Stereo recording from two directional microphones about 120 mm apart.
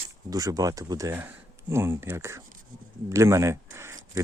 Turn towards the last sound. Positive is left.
turn(degrees=-25)  # may be behind; listen again after turning